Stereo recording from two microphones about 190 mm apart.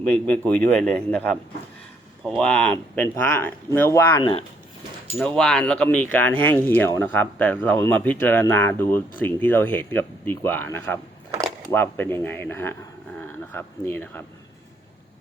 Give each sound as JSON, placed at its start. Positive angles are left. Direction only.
{"t": 0.0, "sound": "speech", "side_deg": 5}
{"t": 4.2, "sound": "speech", "side_deg": 25}
{"t": 5.1, "sound": "speech", "side_deg": 5}